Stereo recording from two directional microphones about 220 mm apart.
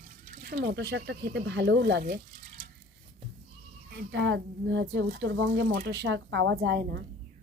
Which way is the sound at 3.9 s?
50° right (ahead or behind).